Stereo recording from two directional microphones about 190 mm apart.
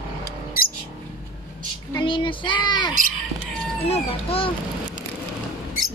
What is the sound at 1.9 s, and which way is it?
Child singing, 25° left (ahead or behind).